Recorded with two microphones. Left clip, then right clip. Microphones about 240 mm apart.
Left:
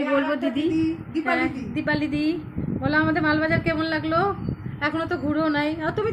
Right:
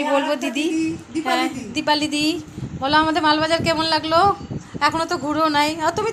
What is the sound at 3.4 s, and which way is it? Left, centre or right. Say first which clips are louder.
Speech: right 4 dB; centre.